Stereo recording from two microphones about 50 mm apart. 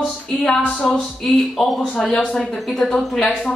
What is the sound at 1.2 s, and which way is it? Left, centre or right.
A woman's voice, centre.